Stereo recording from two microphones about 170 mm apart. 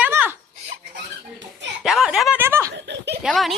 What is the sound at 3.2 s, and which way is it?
Speech, centre (ahead or behind).